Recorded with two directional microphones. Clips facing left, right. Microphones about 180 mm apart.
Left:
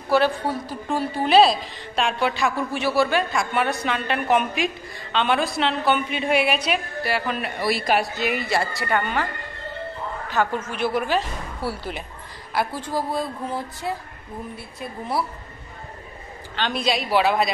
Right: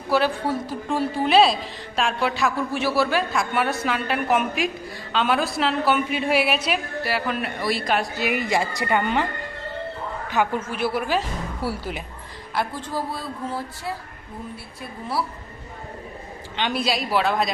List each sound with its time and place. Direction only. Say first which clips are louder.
0.1 s a woman's voice: left 1 dB; centre (ahead or behind)
8.2 s a woman's voice: right 1 dB; 15° right (ahead or behind)
10.3 s a woman's voice: right 1 dB; 10° right (ahead or behind)
12.5 s speech: left 2 dB; 10° left (ahead or behind)
14.8 s speech: left 1 dB; 20° left (ahead or behind)
16.5 s a woman's voice: even; 10° right (ahead or behind)